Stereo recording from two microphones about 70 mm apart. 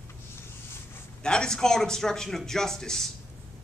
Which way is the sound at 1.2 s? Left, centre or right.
Centre.